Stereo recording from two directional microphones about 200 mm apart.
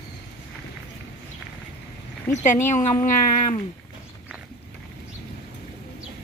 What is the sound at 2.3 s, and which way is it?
Speech, 35° left (ahead or behind).